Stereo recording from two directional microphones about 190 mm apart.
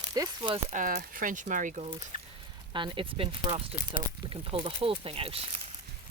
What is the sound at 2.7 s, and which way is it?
Speech, 25° right (ahead or behind).